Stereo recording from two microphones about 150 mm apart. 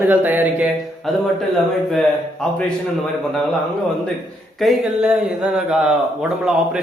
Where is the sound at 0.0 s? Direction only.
10° right (ahead or behind).